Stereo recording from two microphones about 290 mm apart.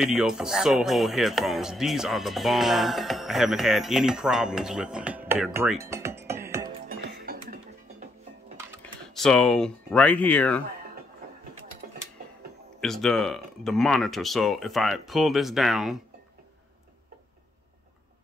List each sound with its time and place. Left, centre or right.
0.0 s speech: centre
6.2 s music: centre
7.2 s music: right
9.1 s speech: centre
12.8 s speech: centre